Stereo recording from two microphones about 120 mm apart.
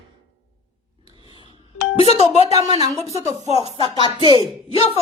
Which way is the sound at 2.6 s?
30° right (ahead or behind).